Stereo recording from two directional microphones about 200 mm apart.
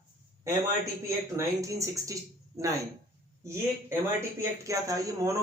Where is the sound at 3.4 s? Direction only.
15° right (ahead or behind).